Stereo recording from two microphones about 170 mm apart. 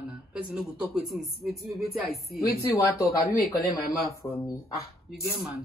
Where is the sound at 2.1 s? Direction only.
65° left (ahead or behind).